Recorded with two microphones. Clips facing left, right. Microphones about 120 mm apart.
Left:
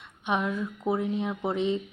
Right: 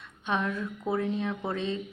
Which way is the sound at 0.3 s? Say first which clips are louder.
Left 2 dB; 15° left (ahead or behind).